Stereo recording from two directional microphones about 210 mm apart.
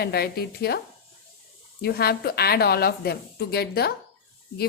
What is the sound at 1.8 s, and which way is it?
A woman's voice, 50° left (ahead or behind).